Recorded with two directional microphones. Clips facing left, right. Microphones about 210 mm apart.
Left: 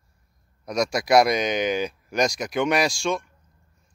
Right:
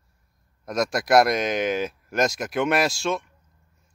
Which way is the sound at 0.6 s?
Centre (ahead or behind).